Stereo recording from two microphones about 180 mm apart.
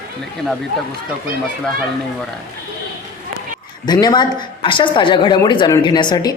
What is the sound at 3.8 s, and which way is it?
A woman's voice, 25° left (ahead or behind).